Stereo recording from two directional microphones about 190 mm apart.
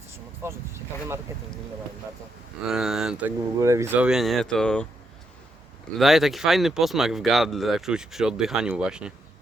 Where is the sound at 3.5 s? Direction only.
15° right (ahead or behind); by 4.8 s 5° left (ahead or behind).